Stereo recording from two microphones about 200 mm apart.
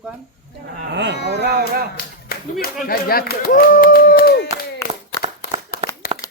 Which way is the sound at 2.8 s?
50° left (ahead or behind).